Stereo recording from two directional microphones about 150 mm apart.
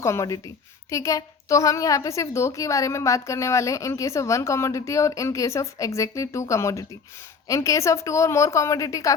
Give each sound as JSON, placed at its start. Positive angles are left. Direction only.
{"t": 0.0, "sound": "a woman's voice", "side_deg": 20}